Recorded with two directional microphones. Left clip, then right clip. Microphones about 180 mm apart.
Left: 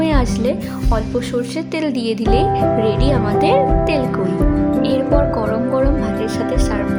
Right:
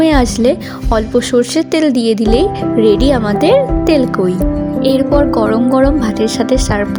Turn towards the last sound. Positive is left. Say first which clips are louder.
# right 6 dB
turn(degrees=-40)  # may be behind; listen again after turning